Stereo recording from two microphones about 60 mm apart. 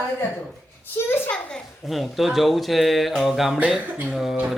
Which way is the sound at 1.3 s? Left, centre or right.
Centre.